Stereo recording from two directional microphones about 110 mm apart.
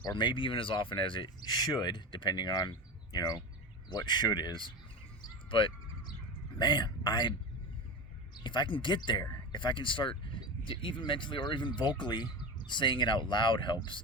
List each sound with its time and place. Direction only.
0.0 s speech: 40° left (ahead or behind)
5.2 s a sound: 50° left (ahead or behind)
6.6 s speech: 45° left (ahead or behind)
8.4 s speech: 45° left (ahead or behind)